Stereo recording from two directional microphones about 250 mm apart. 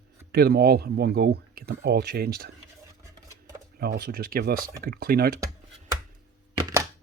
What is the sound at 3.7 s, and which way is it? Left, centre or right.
Speech, right.